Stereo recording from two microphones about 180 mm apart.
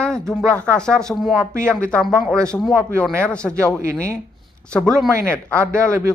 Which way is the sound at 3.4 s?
5° right (ahead or behind).